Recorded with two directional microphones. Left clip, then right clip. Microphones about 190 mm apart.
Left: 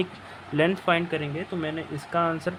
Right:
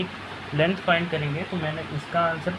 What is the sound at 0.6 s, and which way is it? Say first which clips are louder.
Speech: right 1 dB; 40° left (ahead or behind).